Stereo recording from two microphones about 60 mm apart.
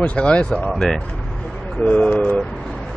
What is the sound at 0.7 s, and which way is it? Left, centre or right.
Speech, centre.